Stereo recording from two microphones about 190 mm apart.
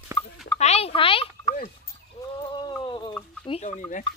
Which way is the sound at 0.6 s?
30° left (ahead or behind).